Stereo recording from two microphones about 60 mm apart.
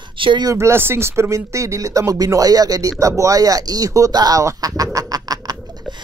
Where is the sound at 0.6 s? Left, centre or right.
Right.